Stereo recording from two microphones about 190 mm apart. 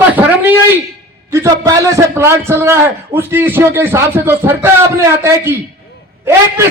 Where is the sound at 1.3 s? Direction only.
15° right (ahead or behind).